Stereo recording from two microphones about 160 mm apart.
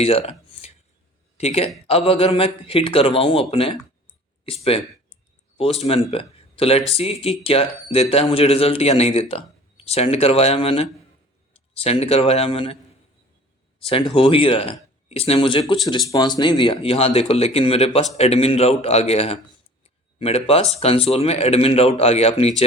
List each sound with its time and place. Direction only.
0.0 s a man's voice: 40° left (ahead or behind)
13.7 s a man's voice: 35° left (ahead or behind)